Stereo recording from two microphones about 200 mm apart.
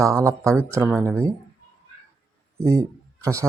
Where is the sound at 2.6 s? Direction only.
15° right (ahead or behind).